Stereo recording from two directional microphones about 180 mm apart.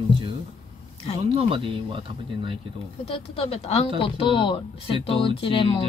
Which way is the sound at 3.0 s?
30° left (ahead or behind).